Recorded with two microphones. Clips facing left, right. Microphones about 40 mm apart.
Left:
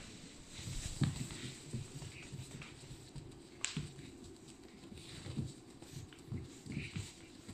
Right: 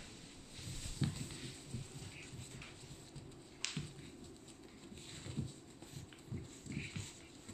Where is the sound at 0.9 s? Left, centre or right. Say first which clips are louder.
Left 2 dB; centre.